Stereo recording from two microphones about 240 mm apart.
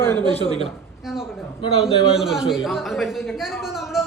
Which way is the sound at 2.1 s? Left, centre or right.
Centre.